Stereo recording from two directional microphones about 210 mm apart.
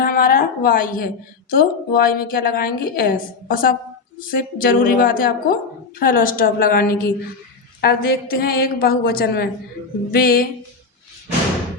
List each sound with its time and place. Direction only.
0.0 s a woman's voice: 45° left (ahead or behind)